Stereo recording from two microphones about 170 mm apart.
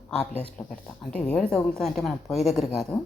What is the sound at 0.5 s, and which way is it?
Speech, 5° left (ahead or behind).